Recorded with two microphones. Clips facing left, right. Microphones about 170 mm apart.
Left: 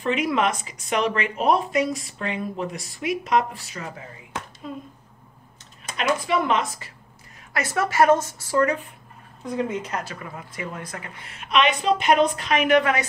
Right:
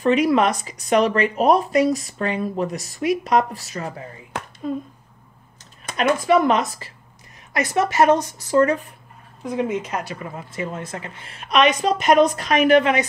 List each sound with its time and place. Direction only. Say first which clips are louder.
0.0 s speech: right 6 dB; 40° right (ahead or behind)
5.9 s speech: right 6 dB; 45° right (ahead or behind)
7.5 s speech: right 3 dB; 20° right (ahead or behind); by 12.8 s 40° right (ahead or behind)